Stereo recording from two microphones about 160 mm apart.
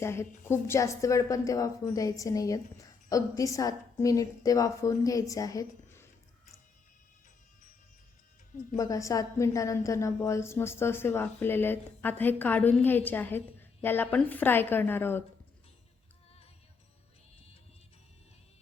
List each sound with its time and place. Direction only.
0.0 s a woman's voice: 15° left (ahead or behind)
8.7 s a woman's voice: 20° left (ahead or behind)